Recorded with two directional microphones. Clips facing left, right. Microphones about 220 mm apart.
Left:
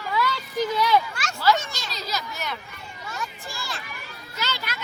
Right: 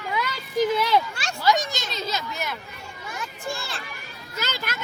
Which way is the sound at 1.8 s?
25° right (ahead or behind).